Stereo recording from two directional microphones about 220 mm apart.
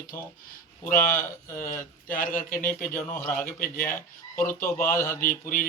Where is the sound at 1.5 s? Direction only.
40° left (ahead or behind).